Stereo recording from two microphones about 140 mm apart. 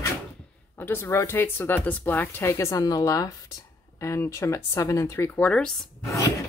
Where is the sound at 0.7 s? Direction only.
15° left (ahead or behind).